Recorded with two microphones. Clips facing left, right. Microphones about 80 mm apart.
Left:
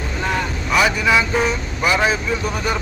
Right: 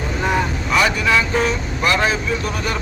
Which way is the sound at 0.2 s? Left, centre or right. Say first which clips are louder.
Right 3 dB; centre.